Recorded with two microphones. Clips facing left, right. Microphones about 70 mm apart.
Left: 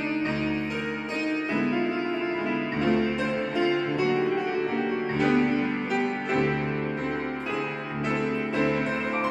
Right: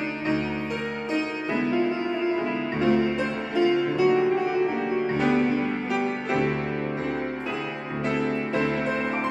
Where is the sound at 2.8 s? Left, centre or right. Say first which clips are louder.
Right 3 dB; centre.